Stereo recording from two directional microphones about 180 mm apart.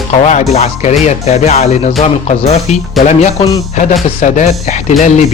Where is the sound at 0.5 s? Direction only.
35° left (ahead or behind).